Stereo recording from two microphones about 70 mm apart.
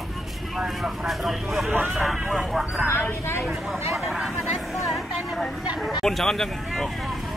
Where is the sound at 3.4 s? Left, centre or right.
Centre.